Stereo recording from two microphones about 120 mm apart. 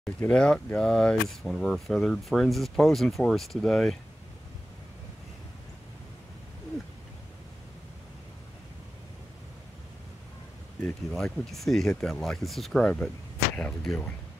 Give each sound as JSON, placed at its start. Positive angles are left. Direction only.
{"t": 0.0, "sound": "speech", "side_deg": 10}
{"t": 10.8, "sound": "speech", "side_deg": 5}